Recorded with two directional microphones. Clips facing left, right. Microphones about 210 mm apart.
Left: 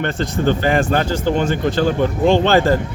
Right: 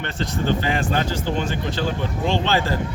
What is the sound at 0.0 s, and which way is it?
A man's voice, 50° left (ahead or behind).